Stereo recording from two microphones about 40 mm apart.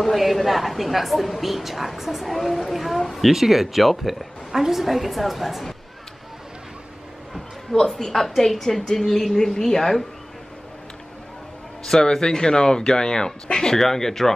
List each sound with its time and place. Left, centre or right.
0.0 s a woman's voice: centre
7.7 s speech: centre
11.8 s speech: centre